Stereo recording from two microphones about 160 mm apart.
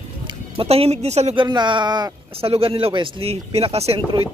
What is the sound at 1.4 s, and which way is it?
Speech, 30° right (ahead or behind).